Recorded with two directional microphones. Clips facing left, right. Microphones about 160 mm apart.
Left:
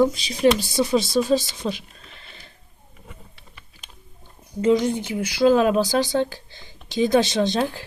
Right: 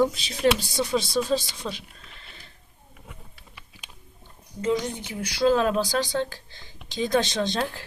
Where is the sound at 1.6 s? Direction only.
25° left (ahead or behind).